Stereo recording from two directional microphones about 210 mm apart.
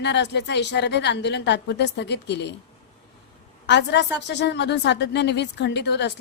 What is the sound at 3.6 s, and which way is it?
Speech, 55° left (ahead or behind).